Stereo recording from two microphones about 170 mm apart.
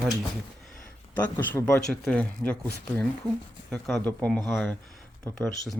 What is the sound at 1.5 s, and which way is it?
Speech, 5° left (ahead or behind).